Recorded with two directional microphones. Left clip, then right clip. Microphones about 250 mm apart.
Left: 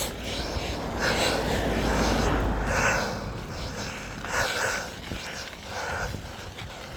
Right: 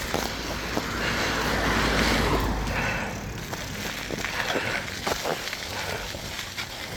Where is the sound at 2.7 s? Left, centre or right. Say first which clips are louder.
Left 5 dB; left.